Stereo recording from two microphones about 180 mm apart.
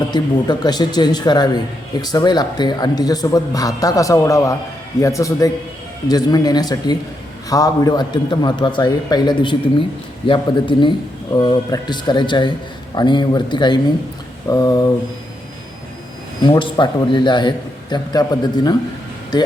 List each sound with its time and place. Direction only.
0.1 s a man's voice: 25° left (ahead or behind)
16.4 s a man's voice: 25° left (ahead or behind)